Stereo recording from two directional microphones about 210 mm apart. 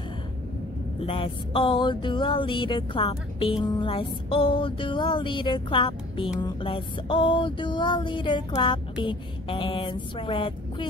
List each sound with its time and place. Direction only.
1.0 s music: 25° left (ahead or behind)